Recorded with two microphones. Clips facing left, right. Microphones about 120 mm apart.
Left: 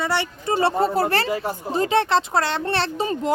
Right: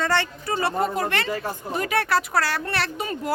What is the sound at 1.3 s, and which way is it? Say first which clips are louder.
Speech: left 3 dB; 15° left (ahead or behind).